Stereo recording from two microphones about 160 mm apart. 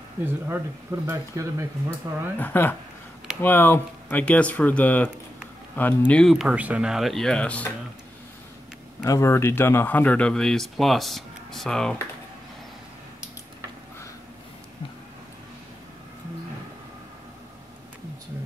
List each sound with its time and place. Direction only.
0.2 s speech: 15° right (ahead or behind)
2.3 s speech: 10° left (ahead or behind)
9.0 s speech: 15° left (ahead or behind)